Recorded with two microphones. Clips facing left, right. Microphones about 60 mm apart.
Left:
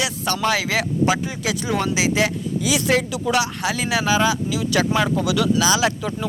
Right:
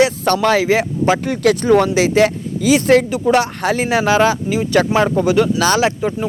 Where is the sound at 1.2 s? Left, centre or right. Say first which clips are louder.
Right 10 dB; right.